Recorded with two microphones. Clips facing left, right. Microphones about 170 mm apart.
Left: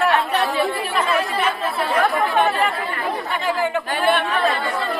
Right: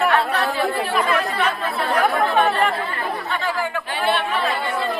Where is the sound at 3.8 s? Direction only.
50° left (ahead or behind).